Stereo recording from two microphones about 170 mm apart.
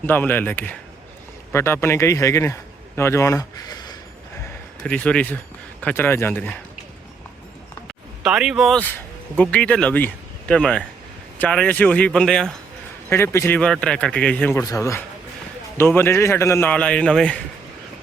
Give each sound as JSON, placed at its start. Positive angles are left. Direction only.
{"t": 0.0, "sound": "a man's voice", "side_deg": 10}
{"t": 4.4, "sound": "a sound", "side_deg": 10}
{"t": 5.8, "sound": "speech", "side_deg": 10}
{"t": 8.2, "sound": "speech", "side_deg": -5}
{"t": 13.1, "sound": "speech", "side_deg": 15}